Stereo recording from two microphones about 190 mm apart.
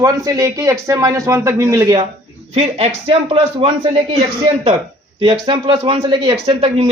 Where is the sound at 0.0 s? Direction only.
20° right (ahead or behind).